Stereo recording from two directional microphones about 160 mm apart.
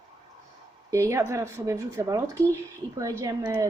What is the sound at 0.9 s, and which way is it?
Speech, 20° right (ahead or behind).